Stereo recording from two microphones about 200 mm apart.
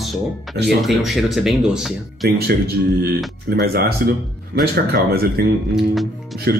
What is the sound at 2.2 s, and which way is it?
Speech, 50° right (ahead or behind).